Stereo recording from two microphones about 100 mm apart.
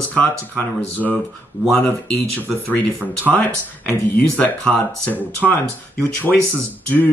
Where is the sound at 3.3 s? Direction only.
15° left (ahead or behind).